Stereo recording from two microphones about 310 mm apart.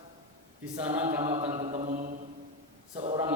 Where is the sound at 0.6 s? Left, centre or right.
Centre.